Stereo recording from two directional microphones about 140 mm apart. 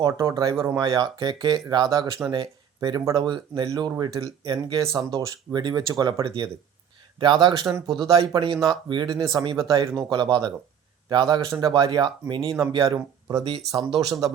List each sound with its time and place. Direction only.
0.0 s speech: 25° right (ahead or behind)
8.5 s speech: centre (ahead or behind)
8.9 s speech: 30° right (ahead or behind)
13.7 s speech: 25° right (ahead or behind)